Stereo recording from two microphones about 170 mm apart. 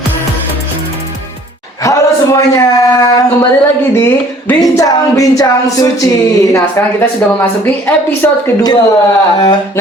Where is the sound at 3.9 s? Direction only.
15° left (ahead or behind).